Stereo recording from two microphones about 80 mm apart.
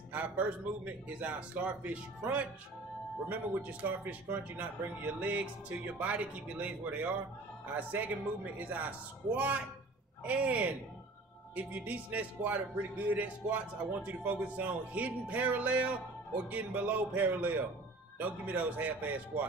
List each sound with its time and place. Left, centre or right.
0.1 s a man's voice: centre